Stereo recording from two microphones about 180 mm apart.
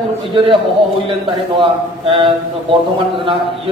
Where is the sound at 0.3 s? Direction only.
25° right (ahead or behind).